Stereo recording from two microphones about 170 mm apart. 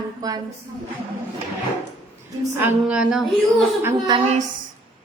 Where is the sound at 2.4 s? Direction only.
15° right (ahead or behind).